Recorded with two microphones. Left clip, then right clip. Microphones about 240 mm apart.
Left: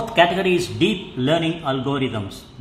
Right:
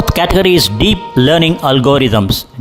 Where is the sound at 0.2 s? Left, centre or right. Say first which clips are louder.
Right 6 dB; right.